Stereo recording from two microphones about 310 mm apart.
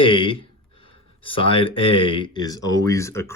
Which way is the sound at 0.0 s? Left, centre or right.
Centre.